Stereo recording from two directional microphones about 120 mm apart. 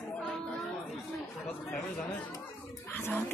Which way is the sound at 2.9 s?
15° left (ahead or behind).